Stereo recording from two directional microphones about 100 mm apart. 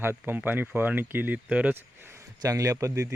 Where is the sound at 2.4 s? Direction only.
35° right (ahead or behind).